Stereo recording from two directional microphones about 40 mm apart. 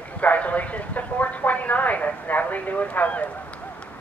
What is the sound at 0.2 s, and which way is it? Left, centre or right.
A woman's voice, left.